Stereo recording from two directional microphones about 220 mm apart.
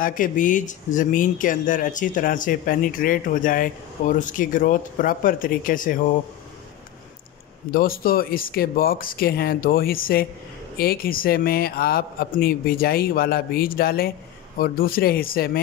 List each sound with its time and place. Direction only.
0.0 s speech: 35° left (ahead or behind)
7.7 s a man's voice: 40° left (ahead or behind)